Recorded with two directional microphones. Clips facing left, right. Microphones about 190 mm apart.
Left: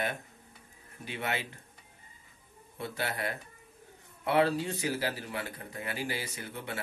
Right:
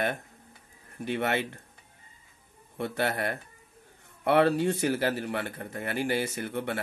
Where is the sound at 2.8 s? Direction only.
55° right (ahead or behind).